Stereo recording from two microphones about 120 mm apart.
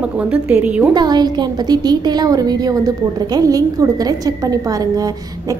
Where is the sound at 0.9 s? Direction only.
35° right (ahead or behind).